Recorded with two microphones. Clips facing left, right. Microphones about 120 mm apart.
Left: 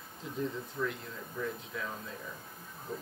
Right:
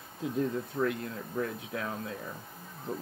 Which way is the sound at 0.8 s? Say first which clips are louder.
Right 5 dB; 60° right (ahead or behind).